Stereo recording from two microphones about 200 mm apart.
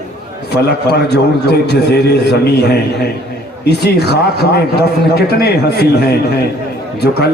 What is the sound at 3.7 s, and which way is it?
A man's voice, 55° left (ahead or behind).